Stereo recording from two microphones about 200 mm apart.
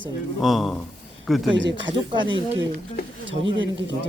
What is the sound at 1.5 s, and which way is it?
Speech, 65° right (ahead or behind).